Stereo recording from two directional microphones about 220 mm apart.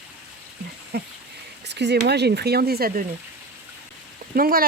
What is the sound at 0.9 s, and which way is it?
Speech, 45° right (ahead or behind).